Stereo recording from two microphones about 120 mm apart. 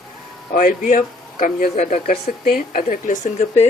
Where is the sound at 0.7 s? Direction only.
90° left.